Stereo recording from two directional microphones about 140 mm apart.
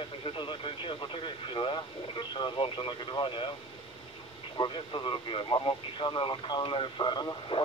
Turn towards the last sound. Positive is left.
turn(degrees=30)  # may be behind; listen again after turning